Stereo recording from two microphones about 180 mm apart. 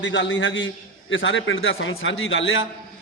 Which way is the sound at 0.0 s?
85° left.